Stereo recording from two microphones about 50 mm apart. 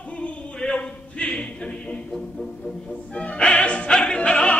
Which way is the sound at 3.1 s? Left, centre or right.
Left.